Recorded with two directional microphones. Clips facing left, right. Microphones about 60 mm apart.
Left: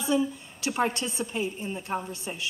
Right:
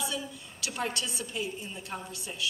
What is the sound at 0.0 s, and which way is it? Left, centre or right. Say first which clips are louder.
A woman's voice: left 9 dB; left.